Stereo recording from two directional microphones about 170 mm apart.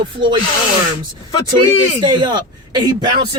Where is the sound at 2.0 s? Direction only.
25° right (ahead or behind).